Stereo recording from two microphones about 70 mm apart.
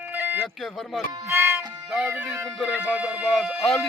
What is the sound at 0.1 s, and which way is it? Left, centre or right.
Music, right.